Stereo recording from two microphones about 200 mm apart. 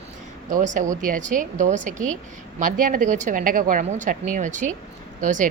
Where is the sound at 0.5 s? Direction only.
40° right (ahead or behind).